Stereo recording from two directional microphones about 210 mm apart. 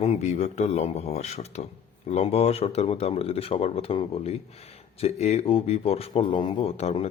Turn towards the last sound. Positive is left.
turn(degrees=30)  # may be behind; listen again after turning